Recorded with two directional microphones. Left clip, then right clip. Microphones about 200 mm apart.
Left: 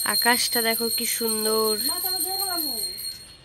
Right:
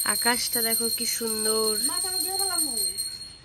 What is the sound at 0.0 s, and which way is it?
Speech, 5° left (ahead or behind).